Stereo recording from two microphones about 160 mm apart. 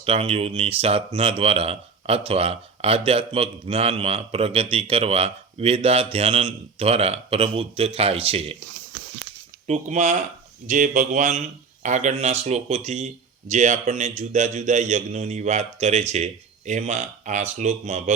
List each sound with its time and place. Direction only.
0.0 s speech: 40° right (ahead or behind)
9.6 s speech: 45° right (ahead or behind)